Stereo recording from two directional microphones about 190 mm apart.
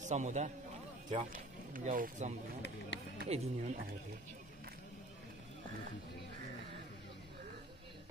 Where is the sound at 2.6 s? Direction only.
70° left (ahead or behind).